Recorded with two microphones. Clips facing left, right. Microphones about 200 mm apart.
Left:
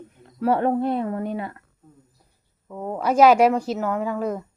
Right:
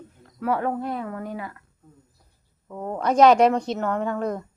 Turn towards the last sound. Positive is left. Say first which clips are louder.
# left 1 dB
turn(degrees=5)  # may be behind; listen again after turning